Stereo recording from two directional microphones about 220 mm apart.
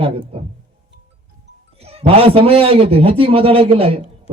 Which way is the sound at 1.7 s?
25° right (ahead or behind).